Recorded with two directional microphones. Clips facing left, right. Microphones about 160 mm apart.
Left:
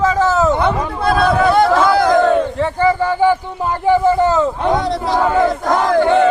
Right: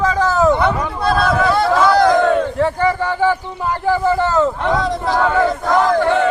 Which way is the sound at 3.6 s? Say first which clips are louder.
Left 3 dB; 20° left (ahead or behind).